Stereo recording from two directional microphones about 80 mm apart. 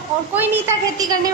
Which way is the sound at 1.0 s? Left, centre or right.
Right.